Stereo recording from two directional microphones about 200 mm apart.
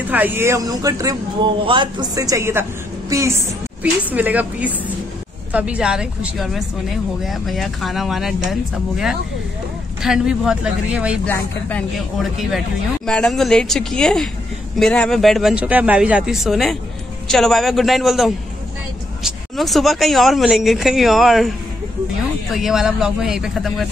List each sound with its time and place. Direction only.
0.1 s a man's voice: 10° right (ahead or behind)
11.2 s speech: 10° left (ahead or behind)